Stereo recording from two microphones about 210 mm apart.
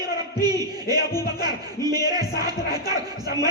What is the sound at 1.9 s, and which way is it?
Speech, 20° right (ahead or behind).